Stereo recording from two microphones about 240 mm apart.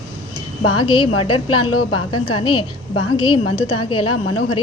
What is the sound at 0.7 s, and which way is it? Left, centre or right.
Speech, left.